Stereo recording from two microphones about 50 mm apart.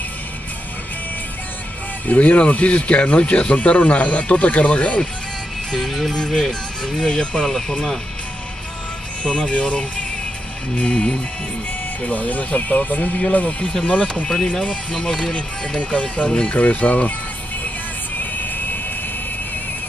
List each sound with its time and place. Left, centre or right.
2.0 s speech: left
5.7 s music: centre
6.3 s speech: centre
9.2 s speech: left
14.3 s speech: centre
15.8 s speech: left
18.2 s music: left